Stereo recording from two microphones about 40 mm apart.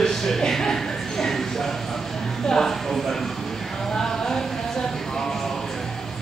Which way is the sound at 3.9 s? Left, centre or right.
Centre.